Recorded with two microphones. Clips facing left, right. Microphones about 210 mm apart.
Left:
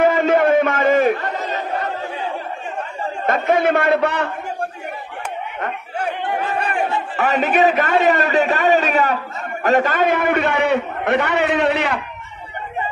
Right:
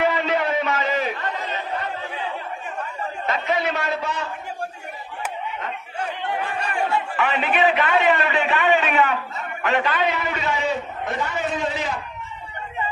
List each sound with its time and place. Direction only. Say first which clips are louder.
0.0 s a sound: left 7 dB; 45° left (ahead or behind)
3.3 s a man's voice: left 7 dB; 50° left (ahead or behind)
5.6 s speech: left 5 dB; 55° left (ahead or behind)